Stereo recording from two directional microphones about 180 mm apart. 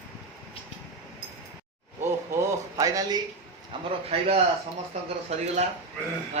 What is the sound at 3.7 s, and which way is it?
Speech, 25° right (ahead or behind).